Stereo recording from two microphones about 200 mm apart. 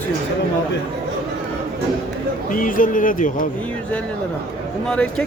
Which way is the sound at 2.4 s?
40° left (ahead or behind).